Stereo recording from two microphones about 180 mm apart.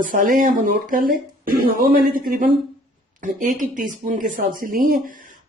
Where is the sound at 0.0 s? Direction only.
50° right (ahead or behind).